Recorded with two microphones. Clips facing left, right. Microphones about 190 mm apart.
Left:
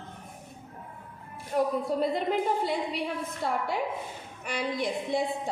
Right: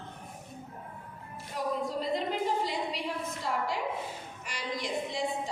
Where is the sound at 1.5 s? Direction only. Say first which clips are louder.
Left 6 dB; 55° left (ahead or behind).